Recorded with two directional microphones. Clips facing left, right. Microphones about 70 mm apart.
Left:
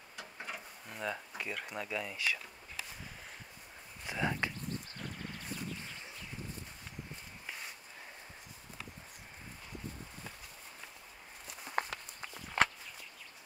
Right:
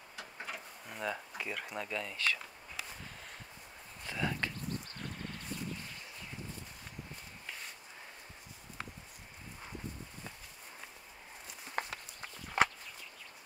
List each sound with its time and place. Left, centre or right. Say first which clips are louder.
0.1 s speech: even; centre
4.0 s speech: left 1 dB; centre
11.4 s walk: left 3 dB; centre